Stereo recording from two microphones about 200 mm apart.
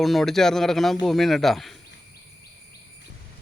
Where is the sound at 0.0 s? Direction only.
Centre (ahead or behind).